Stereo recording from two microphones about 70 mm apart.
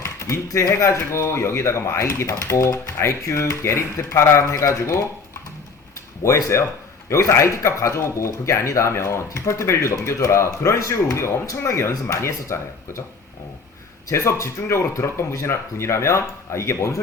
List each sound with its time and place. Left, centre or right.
0.0 s a sound: left
0.5 s speech: left
6.2 s speech: left
14.1 s speech: left